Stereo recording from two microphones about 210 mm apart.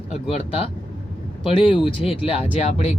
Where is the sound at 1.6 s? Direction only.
25° left (ahead or behind).